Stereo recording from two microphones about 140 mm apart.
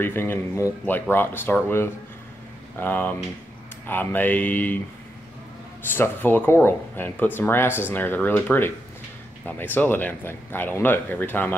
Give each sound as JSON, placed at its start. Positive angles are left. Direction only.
{"t": 0.0, "sound": "speech", "side_deg": 15}
{"t": 5.9, "sound": "speech", "side_deg": 15}